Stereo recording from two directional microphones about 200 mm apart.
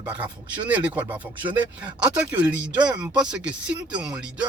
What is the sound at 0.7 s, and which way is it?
Speech, 10° right (ahead or behind).